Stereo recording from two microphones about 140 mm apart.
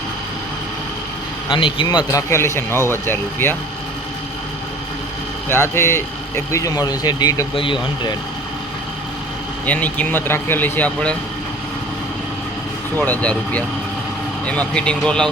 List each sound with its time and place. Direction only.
1.5 s a man's voice: 35° left (ahead or behind)
2.3 s speech: 15° left (ahead or behind)
5.5 s a man's voice: 15° left (ahead or behind); by 8.1 s 35° left (ahead or behind)
9.6 s speech: 10° left (ahead or behind)
13.0 s speech: 10° left (ahead or behind)